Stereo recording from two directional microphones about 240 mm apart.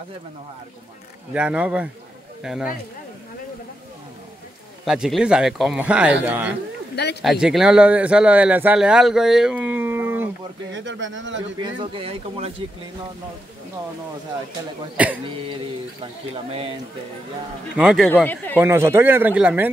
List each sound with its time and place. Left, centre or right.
1.3 s speech: centre
4.8 s speech: centre
10.7 s speech: right
11.6 s speech: right
15.0 s speech: centre
17.7 s speech: centre
18.6 s speech: centre